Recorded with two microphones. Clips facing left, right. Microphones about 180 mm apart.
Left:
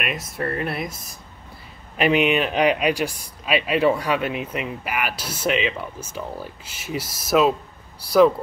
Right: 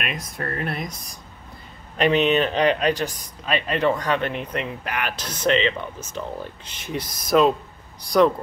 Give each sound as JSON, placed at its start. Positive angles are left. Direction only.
{"t": 0.0, "sound": "speech", "side_deg": 5}
{"t": 2.0, "sound": "a man's voice", "side_deg": 10}